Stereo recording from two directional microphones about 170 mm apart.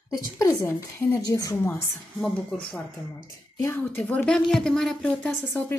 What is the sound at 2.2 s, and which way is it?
Speech, 5° left (ahead or behind).